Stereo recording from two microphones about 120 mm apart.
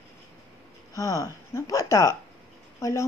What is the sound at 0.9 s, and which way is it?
Speech, 25° left (ahead or behind).